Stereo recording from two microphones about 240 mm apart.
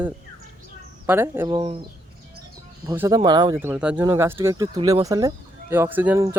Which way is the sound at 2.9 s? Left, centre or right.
Centre.